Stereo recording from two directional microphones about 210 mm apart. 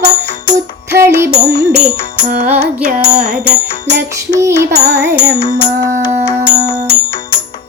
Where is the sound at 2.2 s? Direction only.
35° right (ahead or behind).